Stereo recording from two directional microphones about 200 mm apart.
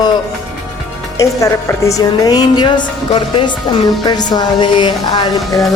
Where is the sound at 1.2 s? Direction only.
15° left (ahead or behind).